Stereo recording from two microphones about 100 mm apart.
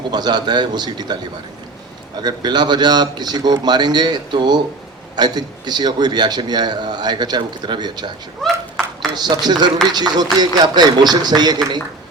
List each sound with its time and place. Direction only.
0.1 s a man's voice: 45° right (ahead or behind)
2.2 s a man's voice: 45° right (ahead or behind)
8.4 s a sound: 5° left (ahead or behind)
9.1 s a man's voice: 45° right (ahead or behind)